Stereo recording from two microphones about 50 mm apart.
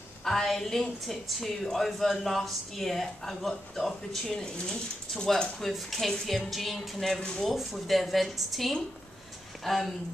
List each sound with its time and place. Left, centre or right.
0.2 s a woman's voice: centre
5.6 s a woman's voice: centre
7.2 s speech: centre
7.4 s a woman's voice: centre